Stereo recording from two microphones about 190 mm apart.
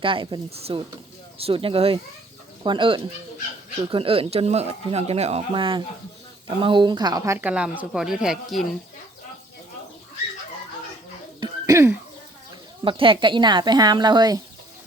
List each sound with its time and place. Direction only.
0.0 s speech: 25° right (ahead or behind); by 8.6 s centre (ahead or behind)
11.3 s cough: 20° right (ahead or behind)
12.8 s speech: 25° right (ahead or behind)